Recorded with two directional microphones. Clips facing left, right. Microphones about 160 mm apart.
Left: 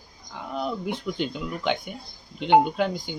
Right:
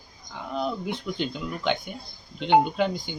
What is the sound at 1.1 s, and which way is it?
Speech, 10° left (ahead or behind).